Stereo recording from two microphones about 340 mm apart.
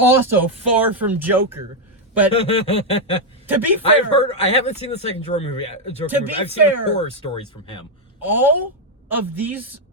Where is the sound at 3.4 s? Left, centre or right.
Centre.